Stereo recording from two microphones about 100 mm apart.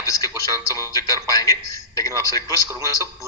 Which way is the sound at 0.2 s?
40° left (ahead or behind).